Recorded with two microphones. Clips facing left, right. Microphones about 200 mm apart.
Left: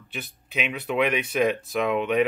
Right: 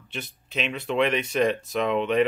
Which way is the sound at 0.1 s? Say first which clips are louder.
Even; 5° left (ahead or behind).